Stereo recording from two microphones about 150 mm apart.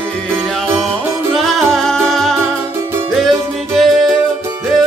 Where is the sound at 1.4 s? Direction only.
Centre (ahead or behind).